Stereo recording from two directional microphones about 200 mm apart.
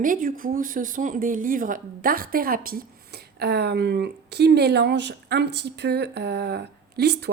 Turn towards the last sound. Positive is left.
turn(degrees=-55)  # may be behind; listen again after turning